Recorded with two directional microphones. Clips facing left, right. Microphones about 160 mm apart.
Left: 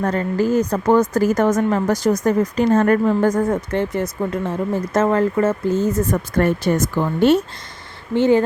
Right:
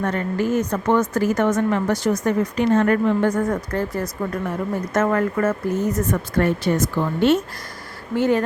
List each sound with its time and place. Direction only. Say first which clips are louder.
0.0 s a woman's voice: left 3 dB; 35° left (ahead or behind)
3.5 s speech: left 3 dB; 25° left (ahead or behind)
6.3 s speech: left 2 dB; 45° left (ahead or behind)
8.1 s speech: left 4 dB; 25° left (ahead or behind)